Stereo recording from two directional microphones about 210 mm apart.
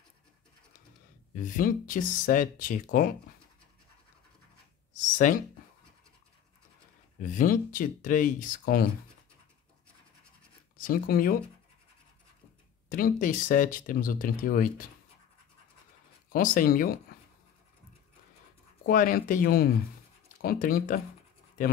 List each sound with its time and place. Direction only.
1.3 s speech: 40° left (ahead or behind)
4.9 s a sound: 35° left (ahead or behind)
7.2 s speech: 40° left (ahead or behind)
10.8 s speech: 45° left (ahead or behind)
12.9 s speech: 40° left (ahead or behind)
16.3 s speech: 40° left (ahead or behind)
18.9 s speech: 40° left (ahead or behind)